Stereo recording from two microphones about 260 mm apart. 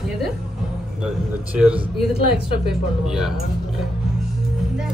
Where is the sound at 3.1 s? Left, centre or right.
Centre.